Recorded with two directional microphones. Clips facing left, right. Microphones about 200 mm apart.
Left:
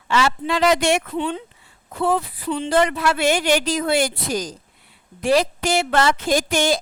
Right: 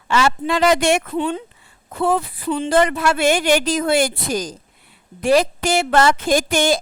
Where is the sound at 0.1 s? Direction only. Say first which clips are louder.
Right 2 dB; 50° right (ahead or behind).